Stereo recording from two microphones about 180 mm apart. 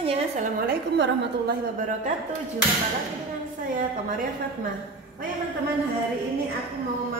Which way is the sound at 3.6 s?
50° right (ahead or behind).